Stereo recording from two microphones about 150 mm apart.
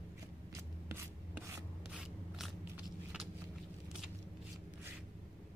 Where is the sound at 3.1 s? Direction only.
5° right (ahead or behind).